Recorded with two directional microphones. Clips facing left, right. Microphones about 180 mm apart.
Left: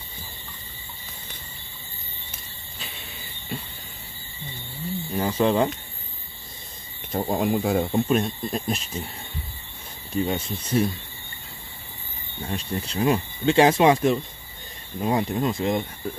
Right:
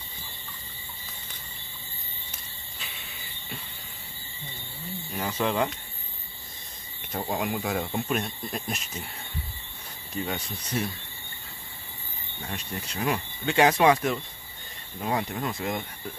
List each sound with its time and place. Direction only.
5.1 s speech: 30° left (ahead or behind)
7.2 s speech: 35° left (ahead or behind)
10.2 s speech: 25° left (ahead or behind)
12.4 s speech: 30° left (ahead or behind)